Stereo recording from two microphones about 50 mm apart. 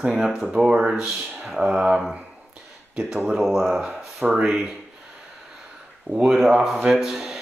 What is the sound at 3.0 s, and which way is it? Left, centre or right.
Speech, centre.